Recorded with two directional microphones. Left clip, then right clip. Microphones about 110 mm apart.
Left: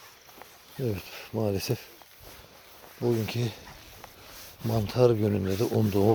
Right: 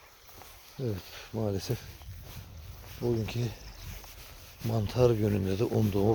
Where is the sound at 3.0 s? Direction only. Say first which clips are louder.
Left 4 dB; 25° left (ahead or behind).